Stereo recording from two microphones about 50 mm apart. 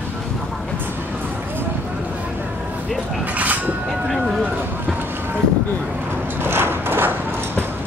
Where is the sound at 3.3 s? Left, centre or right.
Right.